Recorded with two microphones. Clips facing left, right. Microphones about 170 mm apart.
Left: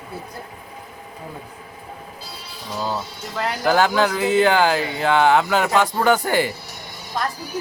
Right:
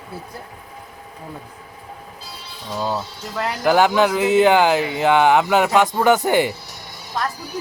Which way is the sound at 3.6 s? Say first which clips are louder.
Right 2 dB; 15° right (ahead or behind).